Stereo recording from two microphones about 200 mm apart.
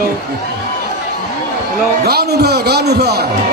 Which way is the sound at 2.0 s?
50° right (ahead or behind).